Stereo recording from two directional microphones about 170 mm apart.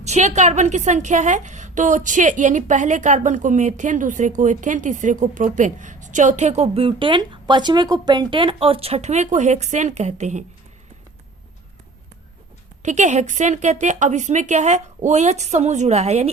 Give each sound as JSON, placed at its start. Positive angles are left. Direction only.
{"t": 0.0, "sound": "a woman's voice", "side_deg": -40}
{"t": 12.8, "sound": "a woman's voice", "side_deg": -45}